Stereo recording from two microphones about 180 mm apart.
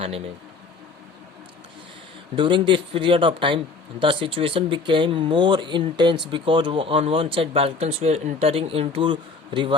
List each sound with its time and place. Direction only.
2.3 s speech: 25° right (ahead or behind)